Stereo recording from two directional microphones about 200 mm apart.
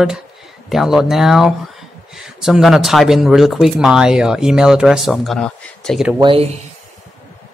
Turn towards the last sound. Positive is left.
turn(degrees=-30)  # may be behind; listen again after turning